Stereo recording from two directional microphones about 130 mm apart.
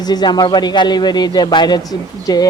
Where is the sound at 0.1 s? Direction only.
35° left (ahead or behind).